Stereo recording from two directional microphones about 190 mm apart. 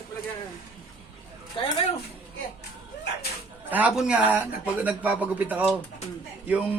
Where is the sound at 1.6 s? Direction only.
25° left (ahead or behind).